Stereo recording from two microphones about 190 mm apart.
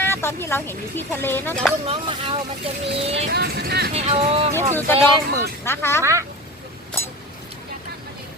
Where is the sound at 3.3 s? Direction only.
60° right (ahead or behind).